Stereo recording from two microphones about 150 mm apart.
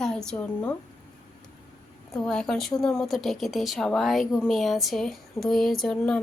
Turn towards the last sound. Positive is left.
turn(degrees=5)  # may be behind; listen again after turning